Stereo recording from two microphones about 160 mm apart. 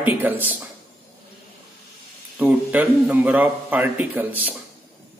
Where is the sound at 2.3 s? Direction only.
10° right (ahead or behind).